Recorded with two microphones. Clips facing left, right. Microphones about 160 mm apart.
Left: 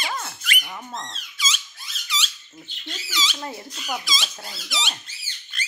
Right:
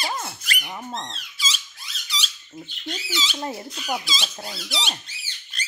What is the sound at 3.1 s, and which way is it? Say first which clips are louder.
Speech: right 1 dB; 30° right (ahead or behind).